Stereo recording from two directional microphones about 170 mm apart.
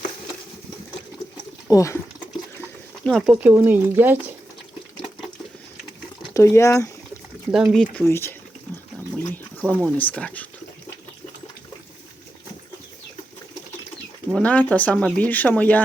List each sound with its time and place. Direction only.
1.7 s speech: 20° left (ahead or behind)
2.6 s a sound: 5° left (ahead or behind)
3.5 s speech: 15° right (ahead or behind)
6.3 s speech: 15° left (ahead or behind)
7.5 s speech: centre (ahead or behind)
8.0 s speech: 15° left (ahead or behind)
14.3 s speech: 10° left (ahead or behind)